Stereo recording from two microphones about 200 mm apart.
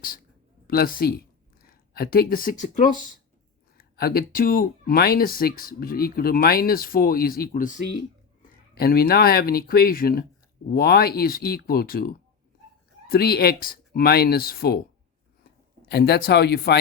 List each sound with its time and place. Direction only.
0.7 s speech: 50° left (ahead or behind)
15.9 s speech: 55° left (ahead or behind)